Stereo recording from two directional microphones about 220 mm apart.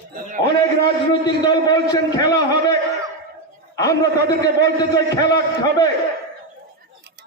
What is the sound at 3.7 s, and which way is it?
A man's voice, 15° left (ahead or behind).